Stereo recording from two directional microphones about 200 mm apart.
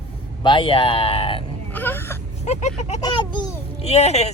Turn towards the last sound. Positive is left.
turn(degrees=35)  # may be behind; listen again after turning